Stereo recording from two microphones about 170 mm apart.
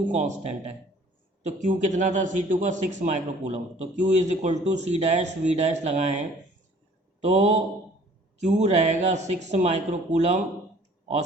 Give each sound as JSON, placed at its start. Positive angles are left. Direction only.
{"t": 0.1, "sound": "a man's voice", "side_deg": -45}